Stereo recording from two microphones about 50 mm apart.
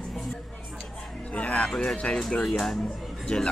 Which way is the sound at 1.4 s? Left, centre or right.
Left.